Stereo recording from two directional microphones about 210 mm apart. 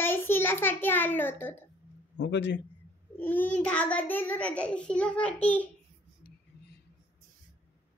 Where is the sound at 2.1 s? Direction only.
55° left (ahead or behind).